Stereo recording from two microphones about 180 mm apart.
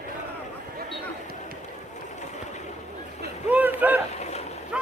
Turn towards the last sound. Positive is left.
turn(degrees=-5)  # may be behind; listen again after turning